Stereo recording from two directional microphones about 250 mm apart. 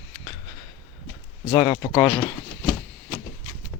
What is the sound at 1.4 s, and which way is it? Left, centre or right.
Speech, centre.